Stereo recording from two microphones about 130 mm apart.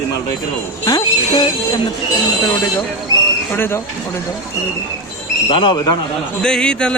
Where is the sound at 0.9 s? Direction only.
30° left (ahead or behind).